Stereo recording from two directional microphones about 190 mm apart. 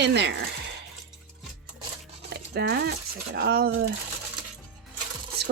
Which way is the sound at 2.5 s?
60° right (ahead or behind).